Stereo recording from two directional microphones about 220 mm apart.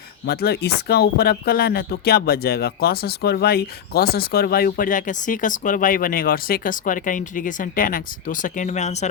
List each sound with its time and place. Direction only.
0.3 s speech: 45° left (ahead or behind); by 9.0 s 30° left (ahead or behind)